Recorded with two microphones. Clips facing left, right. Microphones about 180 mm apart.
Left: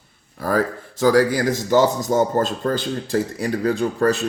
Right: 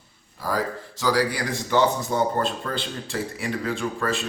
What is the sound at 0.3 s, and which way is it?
A man's voice, 55° left (ahead or behind).